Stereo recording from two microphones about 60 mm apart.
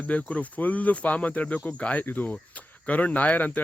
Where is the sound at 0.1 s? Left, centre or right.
Left.